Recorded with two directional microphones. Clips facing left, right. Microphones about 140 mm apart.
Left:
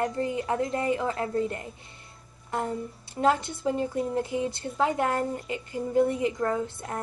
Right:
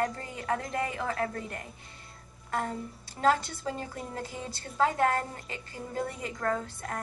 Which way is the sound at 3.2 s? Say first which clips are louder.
Left 2 dB; 20° left (ahead or behind).